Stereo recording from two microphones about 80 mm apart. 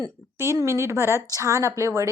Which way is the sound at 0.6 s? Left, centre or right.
Right.